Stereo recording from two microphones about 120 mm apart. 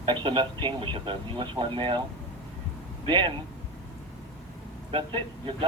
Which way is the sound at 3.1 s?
40° right (ahead or behind).